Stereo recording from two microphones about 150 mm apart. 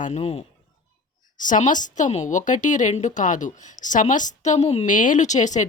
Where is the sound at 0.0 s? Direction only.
45° left (ahead or behind).